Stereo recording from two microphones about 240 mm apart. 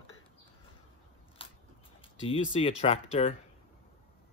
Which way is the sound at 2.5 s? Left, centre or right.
Left.